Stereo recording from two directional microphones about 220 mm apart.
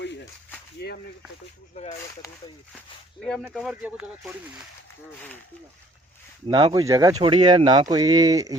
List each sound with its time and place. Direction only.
0.0 s a sound: 50° left (ahead or behind)
1.7 s speech: 30° left (ahead or behind)
2.7 s speech: 5° left (ahead or behind)
6.5 s speech: 20° right (ahead or behind)